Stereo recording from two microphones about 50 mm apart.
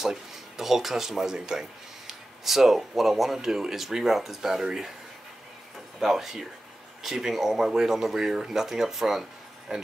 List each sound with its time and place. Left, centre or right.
0.0 s speech: centre
5.9 s speech: centre
9.7 s speech: centre